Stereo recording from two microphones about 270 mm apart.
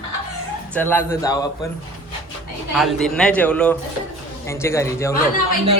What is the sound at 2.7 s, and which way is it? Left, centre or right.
A man's voice, centre.